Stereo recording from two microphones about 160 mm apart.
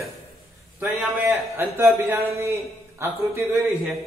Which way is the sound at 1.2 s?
15° right (ahead or behind).